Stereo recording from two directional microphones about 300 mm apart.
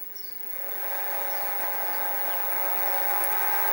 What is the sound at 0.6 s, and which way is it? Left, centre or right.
Vehicle, centre.